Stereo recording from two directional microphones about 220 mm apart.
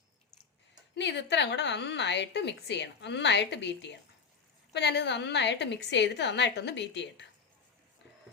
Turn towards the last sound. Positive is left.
turn(degrees=55)  # may be behind; listen again after turning